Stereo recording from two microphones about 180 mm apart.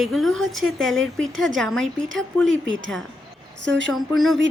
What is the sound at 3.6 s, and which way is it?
Speech, 90° right.